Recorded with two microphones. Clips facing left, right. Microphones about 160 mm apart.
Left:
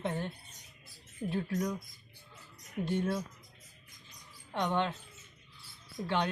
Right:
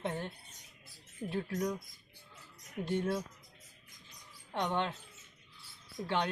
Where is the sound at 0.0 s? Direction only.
Centre (ahead or behind).